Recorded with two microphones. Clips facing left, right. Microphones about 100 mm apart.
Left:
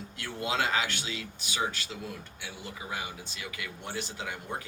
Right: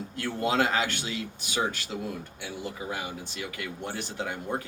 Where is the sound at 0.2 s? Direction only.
45° right (ahead or behind).